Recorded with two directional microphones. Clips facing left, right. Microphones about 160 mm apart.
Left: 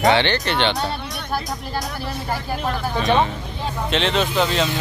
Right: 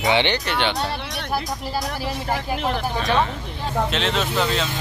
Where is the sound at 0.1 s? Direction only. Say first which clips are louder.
Left 2 dB; 15° right (ahead or behind).